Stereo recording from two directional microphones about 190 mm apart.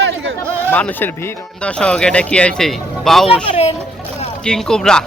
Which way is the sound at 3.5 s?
30° left (ahead or behind).